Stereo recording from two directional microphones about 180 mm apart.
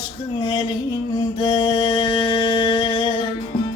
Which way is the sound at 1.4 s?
20° left (ahead or behind).